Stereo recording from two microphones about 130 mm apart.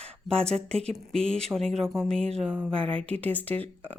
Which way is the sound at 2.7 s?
45° right (ahead or behind).